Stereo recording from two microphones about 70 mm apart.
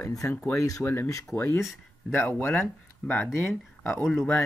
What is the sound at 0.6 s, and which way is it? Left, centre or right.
Speech, left.